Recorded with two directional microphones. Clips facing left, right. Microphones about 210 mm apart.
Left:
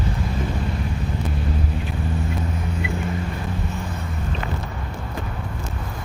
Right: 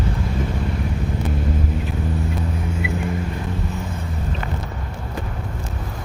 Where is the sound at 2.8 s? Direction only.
5° right (ahead or behind).